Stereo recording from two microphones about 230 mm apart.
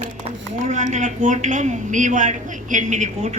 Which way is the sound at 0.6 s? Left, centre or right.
Right.